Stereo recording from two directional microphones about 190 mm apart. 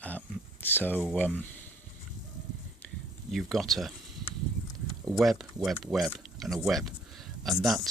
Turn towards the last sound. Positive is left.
turn(degrees=0)  # may be behind; listen again after turning